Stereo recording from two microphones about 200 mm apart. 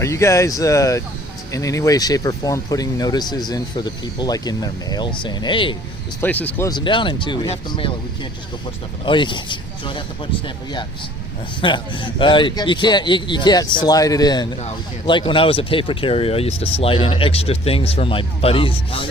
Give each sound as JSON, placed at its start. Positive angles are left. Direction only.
{"t": 0.0, "sound": "speech", "side_deg": 15}
{"t": 6.2, "sound": "speech", "side_deg": 10}
{"t": 6.7, "sound": "speech", "side_deg": 20}
{"t": 11.6, "sound": "speech", "side_deg": 25}